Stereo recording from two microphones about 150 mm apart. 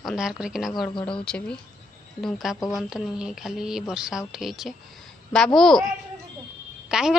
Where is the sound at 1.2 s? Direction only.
5° left (ahead or behind).